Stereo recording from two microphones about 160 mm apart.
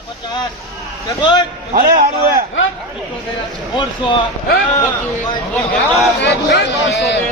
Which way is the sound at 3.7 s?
30° left (ahead or behind).